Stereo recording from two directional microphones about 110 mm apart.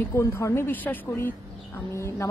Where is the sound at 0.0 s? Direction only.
25° left (ahead or behind).